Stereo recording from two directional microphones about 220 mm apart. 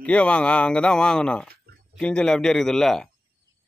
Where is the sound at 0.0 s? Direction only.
5° left (ahead or behind).